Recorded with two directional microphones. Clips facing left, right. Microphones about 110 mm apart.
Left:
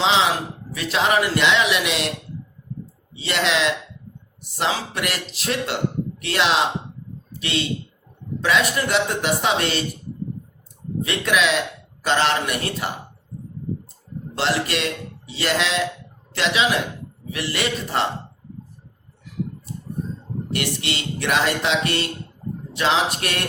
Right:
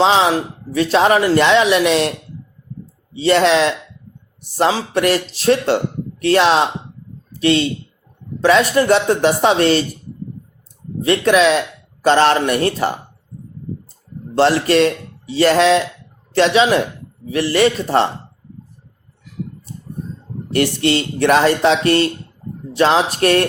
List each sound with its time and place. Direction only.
0.0 s speech: 40° right (ahead or behind)
3.2 s a man's voice: 40° right (ahead or behind)
11.0 s speech: 35° right (ahead or behind)
14.3 s speech: 40° right (ahead or behind)
20.5 s speech: 40° right (ahead or behind)